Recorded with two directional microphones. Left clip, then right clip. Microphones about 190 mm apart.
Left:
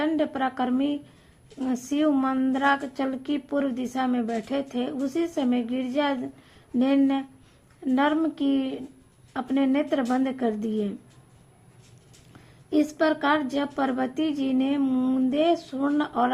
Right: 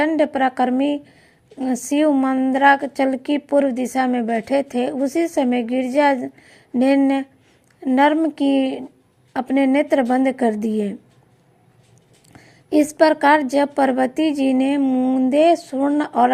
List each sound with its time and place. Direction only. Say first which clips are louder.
0.1 s a woman's voice: right 8 dB; 20° right (ahead or behind)
12.3 s a woman's voice: right 7 dB; 25° right (ahead or behind)
14.4 s a sound: right 7 dB; 20° right (ahead or behind)
15.3 s a woman's voice: right 11 dB; 25° right (ahead or behind)